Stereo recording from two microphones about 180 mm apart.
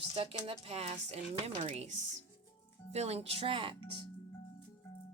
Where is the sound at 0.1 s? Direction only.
30° right (ahead or behind).